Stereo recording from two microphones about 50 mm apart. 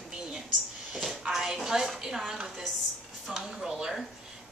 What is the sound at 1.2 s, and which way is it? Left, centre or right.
A woman's voice, centre.